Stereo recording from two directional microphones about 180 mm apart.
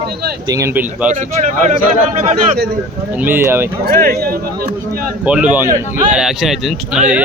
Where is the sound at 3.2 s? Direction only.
10° right (ahead or behind).